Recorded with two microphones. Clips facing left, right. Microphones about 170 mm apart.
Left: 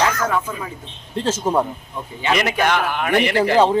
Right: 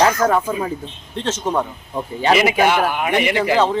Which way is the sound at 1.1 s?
10° left (ahead or behind).